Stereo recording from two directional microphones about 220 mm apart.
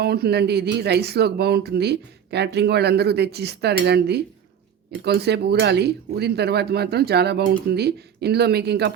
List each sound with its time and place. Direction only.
0.0 s speech: 45° right (ahead or behind)